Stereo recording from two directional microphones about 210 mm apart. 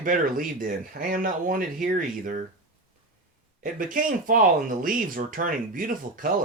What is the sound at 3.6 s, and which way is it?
Speech, 40° right (ahead or behind).